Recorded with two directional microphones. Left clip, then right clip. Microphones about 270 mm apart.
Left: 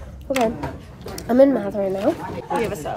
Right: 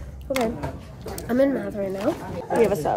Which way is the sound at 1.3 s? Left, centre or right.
Centre.